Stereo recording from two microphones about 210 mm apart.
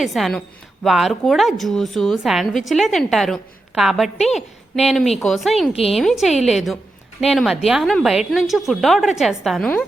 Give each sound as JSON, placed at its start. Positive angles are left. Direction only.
{"t": 0.0, "sound": "a woman's voice", "side_deg": 0}
{"t": 5.7, "sound": "a woman's voice", "side_deg": 30}
{"t": 6.0, "sound": "a woman's voice", "side_deg": 0}